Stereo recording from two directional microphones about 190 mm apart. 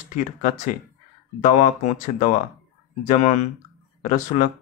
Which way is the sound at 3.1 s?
35° left (ahead or behind).